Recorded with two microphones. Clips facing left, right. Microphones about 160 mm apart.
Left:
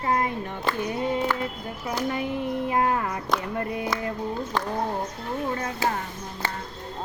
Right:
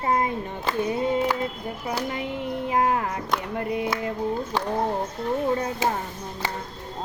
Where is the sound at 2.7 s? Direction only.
20° right (ahead or behind).